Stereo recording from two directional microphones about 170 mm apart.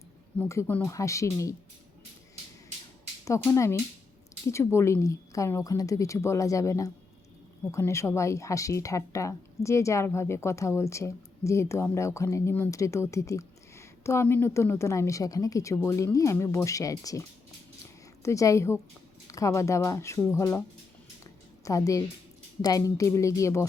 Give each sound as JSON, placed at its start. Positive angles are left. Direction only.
{"t": 0.3, "sound": "speech", "side_deg": 15}
{"t": 3.2, "sound": "a woman's voice", "side_deg": 20}